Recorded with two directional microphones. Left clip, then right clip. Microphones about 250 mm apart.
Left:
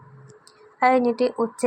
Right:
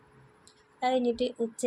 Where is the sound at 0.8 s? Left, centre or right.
Centre.